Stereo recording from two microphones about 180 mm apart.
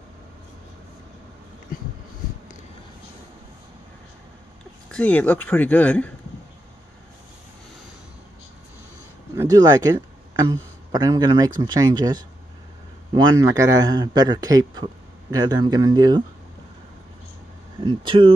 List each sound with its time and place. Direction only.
4.9 s speech: 10° left (ahead or behind)
9.3 s a man's voice: 20° right (ahead or behind)
17.7 s a man's voice: 25° right (ahead or behind)